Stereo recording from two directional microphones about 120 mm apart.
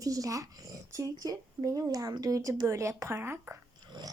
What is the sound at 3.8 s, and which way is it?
Dog, 40° right (ahead or behind).